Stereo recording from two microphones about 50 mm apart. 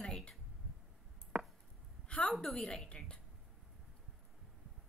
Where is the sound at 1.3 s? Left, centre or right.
Centre.